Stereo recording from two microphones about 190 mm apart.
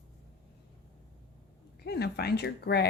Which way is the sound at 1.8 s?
55° left (ahead or behind).